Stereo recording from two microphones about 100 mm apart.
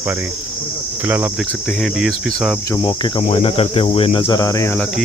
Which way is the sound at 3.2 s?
70° left (ahead or behind).